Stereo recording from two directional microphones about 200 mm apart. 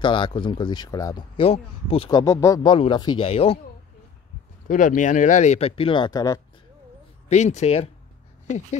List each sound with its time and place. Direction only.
0.0 s speech: 25° left (ahead or behind)
2.0 s speech: 15° left (ahead or behind)
4.6 s speech: 40° left (ahead or behind); by 6.4 s 20° left (ahead or behind)
7.2 s speech: 35° left (ahead or behind)